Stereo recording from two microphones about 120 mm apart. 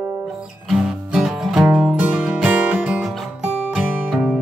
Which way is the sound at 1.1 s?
5° right (ahead or behind).